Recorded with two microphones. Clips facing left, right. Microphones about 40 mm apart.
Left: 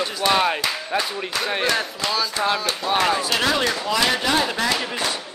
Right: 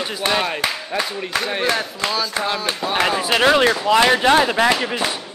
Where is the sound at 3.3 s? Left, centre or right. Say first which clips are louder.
Right 6 dB; right.